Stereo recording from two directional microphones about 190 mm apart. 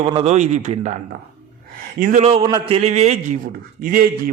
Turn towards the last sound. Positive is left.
turn(degrees=-50)  # may be behind; listen again after turning